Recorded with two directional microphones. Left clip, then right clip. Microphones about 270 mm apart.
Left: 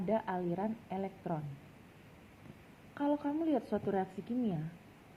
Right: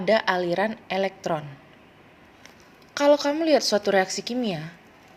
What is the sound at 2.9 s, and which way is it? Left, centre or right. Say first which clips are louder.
A woman's voice: right 15 dB; right.